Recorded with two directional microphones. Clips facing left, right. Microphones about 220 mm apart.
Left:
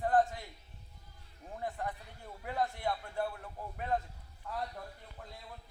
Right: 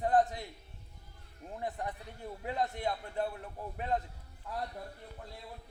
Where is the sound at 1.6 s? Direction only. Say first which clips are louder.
Right 1 dB; 20° right (ahead or behind).